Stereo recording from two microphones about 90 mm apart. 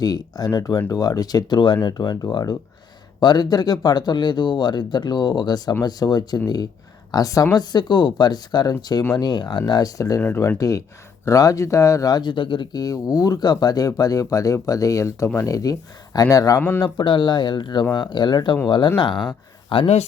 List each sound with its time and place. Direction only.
0.0 s speech: 45° left (ahead or behind); by 12.8 s 65° left (ahead or behind)
12.8 s speech: 45° left (ahead or behind)
16.6 s speech: 20° left (ahead or behind)
16.8 s speech: 60° left (ahead or behind)
19.7 s speech: 70° left (ahead or behind)